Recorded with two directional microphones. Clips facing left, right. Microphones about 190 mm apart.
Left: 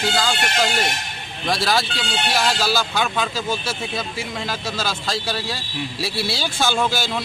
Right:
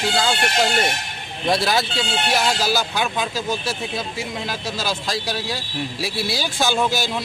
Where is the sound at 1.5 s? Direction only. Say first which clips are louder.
Right 1 dB; 20° right (ahead or behind).